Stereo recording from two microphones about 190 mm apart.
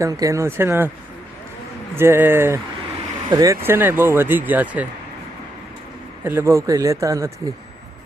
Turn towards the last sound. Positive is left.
turn(degrees=-15)  # may be behind; listen again after turning